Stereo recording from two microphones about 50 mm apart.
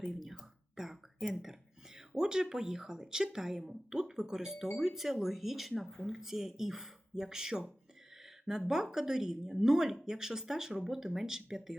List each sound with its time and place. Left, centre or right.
0.1 s speech: centre
1.3 s a sound: centre
2.0 s speech: centre